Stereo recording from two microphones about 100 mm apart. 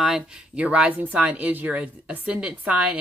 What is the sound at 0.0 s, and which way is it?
Speech, 5° right (ahead or behind).